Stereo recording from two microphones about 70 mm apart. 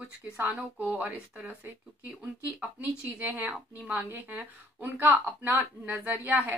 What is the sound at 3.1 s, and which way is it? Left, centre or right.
Speech, right.